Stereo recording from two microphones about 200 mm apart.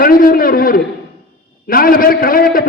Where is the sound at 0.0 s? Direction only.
45° left (ahead or behind).